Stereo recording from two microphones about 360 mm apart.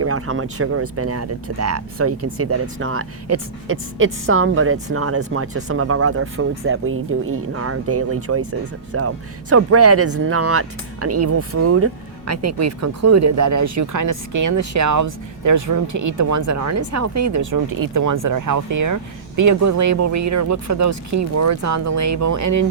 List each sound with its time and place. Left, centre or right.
0.0 s speech: right